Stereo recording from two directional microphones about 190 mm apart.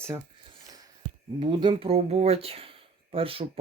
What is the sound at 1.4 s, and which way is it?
Speech, 25° right (ahead or behind).